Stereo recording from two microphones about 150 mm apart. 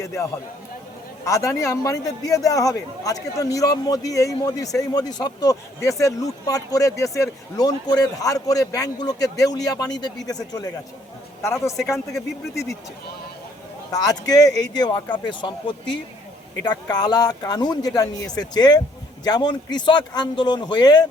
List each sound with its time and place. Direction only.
0.0 s a man's voice: 20° left (ahead or behind)
13.9 s a man's voice: 25° left (ahead or behind)